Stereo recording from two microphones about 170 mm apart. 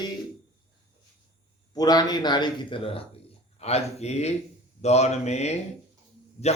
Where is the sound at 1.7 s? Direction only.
25° left (ahead or behind).